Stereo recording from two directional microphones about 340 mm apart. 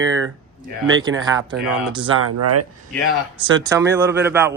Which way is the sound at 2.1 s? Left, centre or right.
Right.